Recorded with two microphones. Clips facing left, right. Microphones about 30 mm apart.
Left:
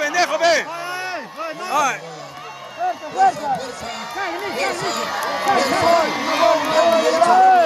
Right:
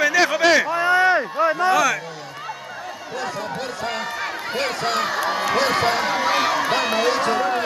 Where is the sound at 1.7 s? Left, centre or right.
Centre.